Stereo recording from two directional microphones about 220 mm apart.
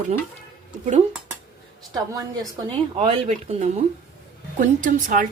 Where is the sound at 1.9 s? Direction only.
15° right (ahead or behind).